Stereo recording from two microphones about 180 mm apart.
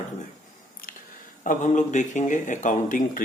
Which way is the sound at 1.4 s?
45° left (ahead or behind).